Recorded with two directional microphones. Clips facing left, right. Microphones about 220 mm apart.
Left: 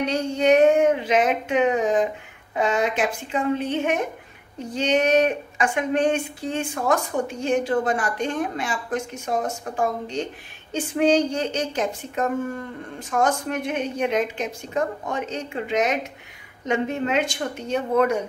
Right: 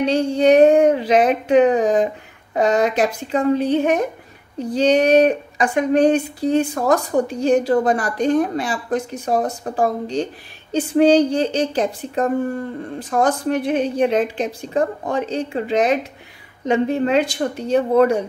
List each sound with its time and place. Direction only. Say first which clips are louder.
0.0 s speech: right 6 dB; 30° right (ahead or behind)